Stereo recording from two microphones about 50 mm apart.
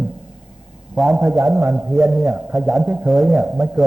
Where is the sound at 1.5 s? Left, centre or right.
Right.